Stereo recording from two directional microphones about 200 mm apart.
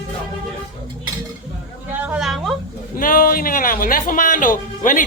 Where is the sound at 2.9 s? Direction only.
45° left (ahead or behind).